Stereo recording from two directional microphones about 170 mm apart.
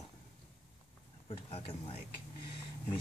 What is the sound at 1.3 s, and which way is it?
Speech, 35° left (ahead or behind).